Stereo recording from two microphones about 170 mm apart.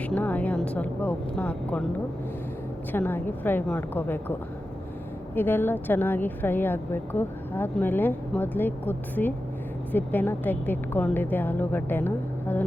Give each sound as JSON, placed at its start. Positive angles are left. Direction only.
{"t": 0.0, "sound": "speech", "side_deg": 10}
{"t": 2.9, "sound": "speech", "side_deg": 10}